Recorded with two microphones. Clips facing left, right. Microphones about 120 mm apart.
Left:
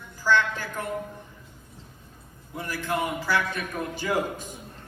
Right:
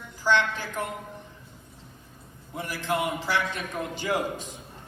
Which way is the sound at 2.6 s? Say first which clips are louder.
Even; 15° right (ahead or behind).